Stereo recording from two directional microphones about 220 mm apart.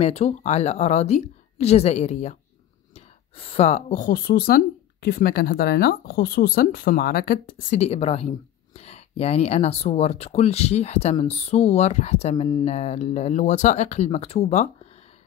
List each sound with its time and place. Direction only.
0.0 s speech: 30° left (ahead or behind)
7.7 s speech: 30° left (ahead or behind)